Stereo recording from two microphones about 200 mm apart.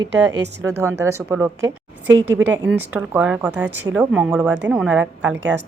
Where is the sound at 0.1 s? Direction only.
60° right (ahead or behind).